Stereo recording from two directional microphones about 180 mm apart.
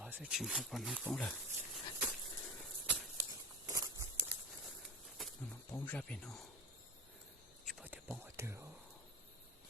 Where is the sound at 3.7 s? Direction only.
20° right (ahead or behind).